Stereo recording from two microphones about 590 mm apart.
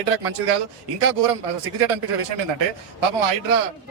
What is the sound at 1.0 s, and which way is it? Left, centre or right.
A man's voice, right.